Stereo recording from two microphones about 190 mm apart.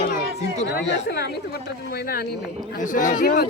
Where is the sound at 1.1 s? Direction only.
55° left (ahead or behind).